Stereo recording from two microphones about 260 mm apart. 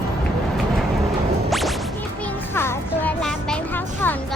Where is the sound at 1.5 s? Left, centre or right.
Centre.